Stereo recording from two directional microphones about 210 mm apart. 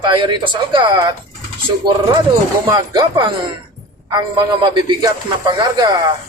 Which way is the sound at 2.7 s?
20° right (ahead or behind).